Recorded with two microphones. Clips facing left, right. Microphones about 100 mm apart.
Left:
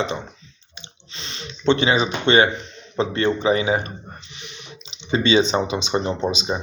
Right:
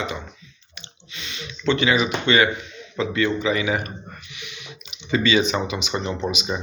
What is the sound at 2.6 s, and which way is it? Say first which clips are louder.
Speech: left 3 dB; 35° left (ahead or behind).